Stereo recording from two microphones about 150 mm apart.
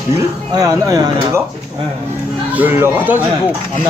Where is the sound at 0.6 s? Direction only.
25° right (ahead or behind).